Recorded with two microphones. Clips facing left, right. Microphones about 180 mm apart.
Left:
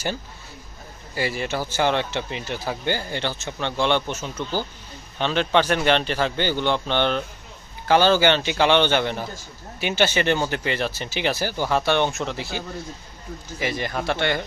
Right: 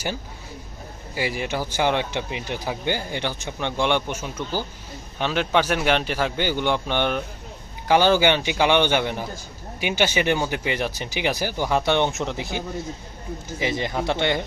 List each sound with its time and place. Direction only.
1.1 s speech: 15° right (ahead or behind)